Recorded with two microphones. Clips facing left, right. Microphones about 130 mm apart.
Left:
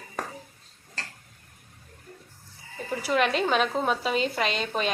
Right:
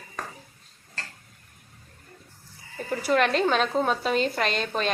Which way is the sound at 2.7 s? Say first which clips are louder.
Right 2 dB; 5° left (ahead or behind).